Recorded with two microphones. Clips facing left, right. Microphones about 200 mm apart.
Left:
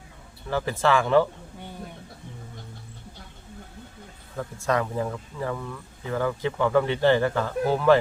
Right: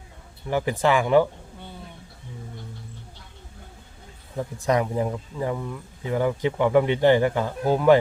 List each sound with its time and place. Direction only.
0.4 s speech: 15° right (ahead or behind)
4.4 s speech: 15° right (ahead or behind)